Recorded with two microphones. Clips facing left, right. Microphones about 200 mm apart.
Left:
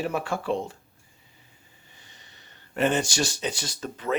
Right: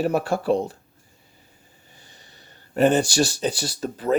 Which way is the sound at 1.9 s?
35° right (ahead or behind).